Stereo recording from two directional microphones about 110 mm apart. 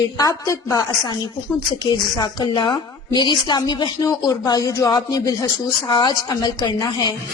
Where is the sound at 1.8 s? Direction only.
45° left (ahead or behind).